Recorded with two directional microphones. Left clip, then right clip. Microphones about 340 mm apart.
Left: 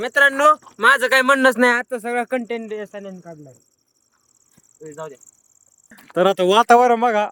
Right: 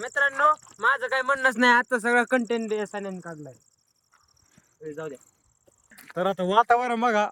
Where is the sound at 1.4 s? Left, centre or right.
Centre.